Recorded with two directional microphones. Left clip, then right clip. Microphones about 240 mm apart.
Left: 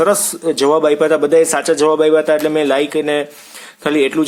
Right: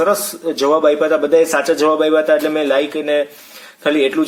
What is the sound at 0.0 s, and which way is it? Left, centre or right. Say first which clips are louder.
Speech: left 2 dB; left.